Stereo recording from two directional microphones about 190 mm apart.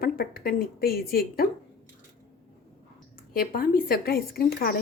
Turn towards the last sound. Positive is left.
turn(degrees=55)  # may be behind; listen again after turning